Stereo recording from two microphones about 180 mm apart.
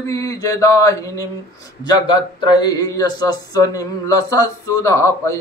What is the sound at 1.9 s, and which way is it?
Speech, 25° left (ahead or behind).